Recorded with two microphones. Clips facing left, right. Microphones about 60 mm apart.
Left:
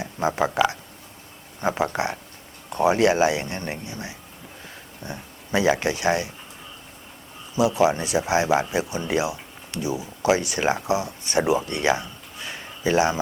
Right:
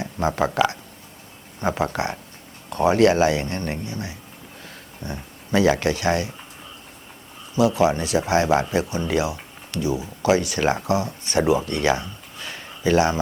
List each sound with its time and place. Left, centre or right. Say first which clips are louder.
0.0 s speech: right 1 dB; centre
1.6 s speech: even; centre
7.8 s speech: right 1 dB; left